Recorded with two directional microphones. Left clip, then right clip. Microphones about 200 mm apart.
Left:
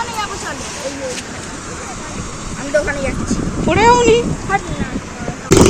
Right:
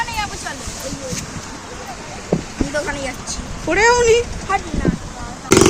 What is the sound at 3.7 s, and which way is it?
Speech, 30° right (ahead or behind).